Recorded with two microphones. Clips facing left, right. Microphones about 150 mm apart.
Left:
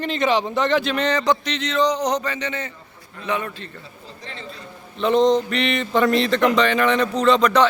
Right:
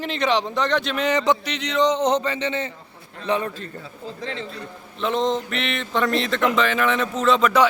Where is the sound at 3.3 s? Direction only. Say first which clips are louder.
Right 2 dB; 30° right (ahead or behind).